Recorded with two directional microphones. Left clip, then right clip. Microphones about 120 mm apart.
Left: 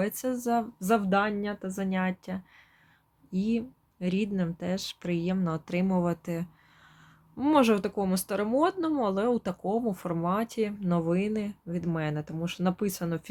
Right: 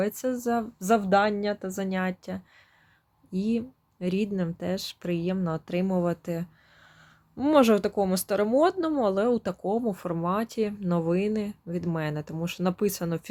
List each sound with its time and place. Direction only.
0.0 s a woman's voice: 35° right (ahead or behind)